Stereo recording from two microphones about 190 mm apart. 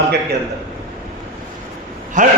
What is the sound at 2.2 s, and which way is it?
Speech, 40° right (ahead or behind).